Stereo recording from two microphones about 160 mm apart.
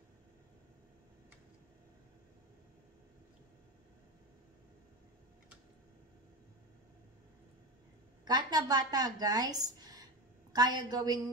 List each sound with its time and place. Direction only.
8.3 s a woman's voice: 25° right (ahead or behind)